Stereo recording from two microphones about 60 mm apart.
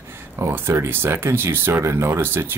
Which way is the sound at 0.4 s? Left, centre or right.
Right.